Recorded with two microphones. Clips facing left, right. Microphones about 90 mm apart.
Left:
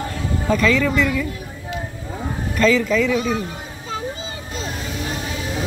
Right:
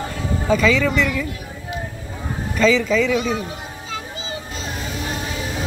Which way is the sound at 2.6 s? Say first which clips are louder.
Even; centre (ahead or behind).